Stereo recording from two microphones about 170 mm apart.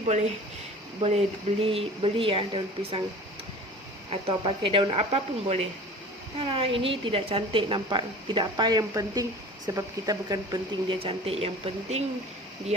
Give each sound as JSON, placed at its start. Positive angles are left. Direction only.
{"t": 0.0, "sound": "a woman's voice", "side_deg": -40}
{"t": 4.1, "sound": "a woman's voice", "side_deg": -30}